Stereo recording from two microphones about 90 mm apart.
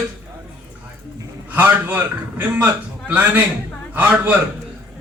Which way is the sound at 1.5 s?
20° right (ahead or behind).